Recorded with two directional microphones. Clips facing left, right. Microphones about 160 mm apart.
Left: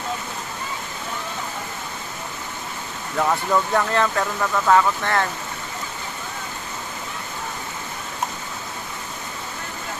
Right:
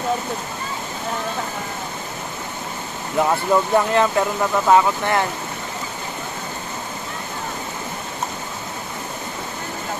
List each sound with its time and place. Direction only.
3.2 s speech: 15° right (ahead or behind)